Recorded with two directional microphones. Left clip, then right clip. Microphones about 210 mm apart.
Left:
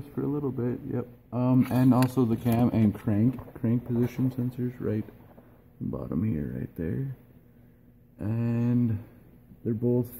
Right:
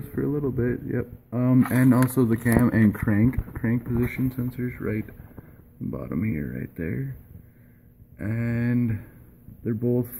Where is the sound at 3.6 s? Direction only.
Centre (ahead or behind).